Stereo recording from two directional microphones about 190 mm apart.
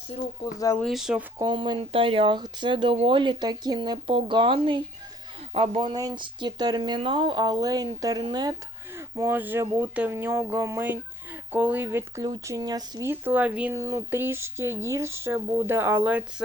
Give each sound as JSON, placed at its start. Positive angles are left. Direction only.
{"t": 0.8, "sound": "speech", "side_deg": 0}
{"t": 1.4, "sound": "speech", "side_deg": -25}